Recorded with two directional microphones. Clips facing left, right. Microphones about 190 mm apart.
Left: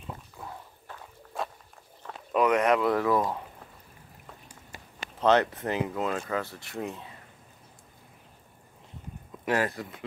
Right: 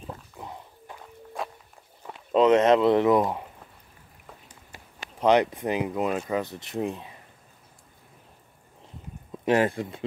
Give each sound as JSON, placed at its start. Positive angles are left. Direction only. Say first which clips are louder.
{"t": 0.4, "sound": "dog", "louder": "right 2 dB", "side_deg": -20}
{"t": 1.4, "sound": "a sound", "louder": "even", "side_deg": 0}
{"t": 2.3, "sound": "speech", "louder": "right 5 dB", "side_deg": -25}
{"t": 5.2, "sound": "speech", "louder": "right 2 dB", "side_deg": -15}
{"t": 9.4, "sound": "speech", "louder": "right 5 dB", "side_deg": -25}